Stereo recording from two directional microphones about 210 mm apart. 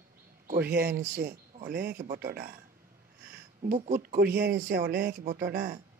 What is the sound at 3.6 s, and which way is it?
Speech, 45° right (ahead or behind).